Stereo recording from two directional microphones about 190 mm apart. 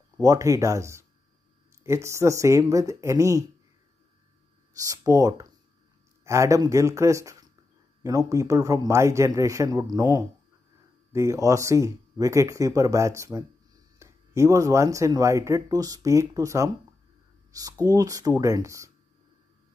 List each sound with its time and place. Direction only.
0.2 s speech: 15° right (ahead or behind)
4.7 s speech: 20° right (ahead or behind)